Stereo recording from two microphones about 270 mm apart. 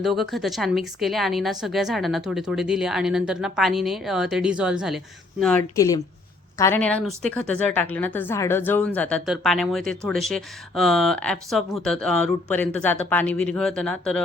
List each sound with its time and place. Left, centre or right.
0.0 s a woman's voice: centre